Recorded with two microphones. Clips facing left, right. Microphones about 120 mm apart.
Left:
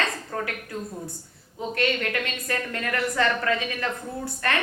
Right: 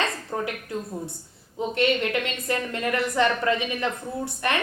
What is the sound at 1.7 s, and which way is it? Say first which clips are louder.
A woman's voice: right 3 dB; 20° right (ahead or behind).